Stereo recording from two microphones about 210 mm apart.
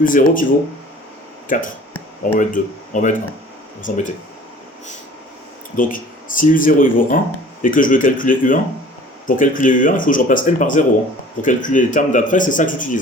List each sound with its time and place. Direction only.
0.0 s speech: 40° left (ahead or behind)
2.2 s speech: 40° left (ahead or behind)
5.7 s speech: 40° left (ahead or behind)